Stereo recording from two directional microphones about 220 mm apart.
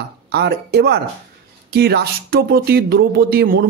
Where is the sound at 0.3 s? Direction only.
50° right (ahead or behind).